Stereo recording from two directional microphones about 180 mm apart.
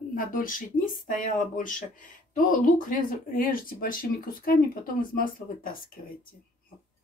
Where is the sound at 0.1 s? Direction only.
50° left (ahead or behind).